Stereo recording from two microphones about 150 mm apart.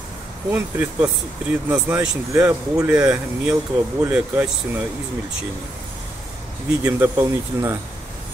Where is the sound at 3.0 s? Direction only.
10° right (ahead or behind).